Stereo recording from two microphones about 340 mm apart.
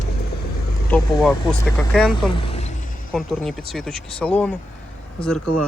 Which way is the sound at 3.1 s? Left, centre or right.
Centre.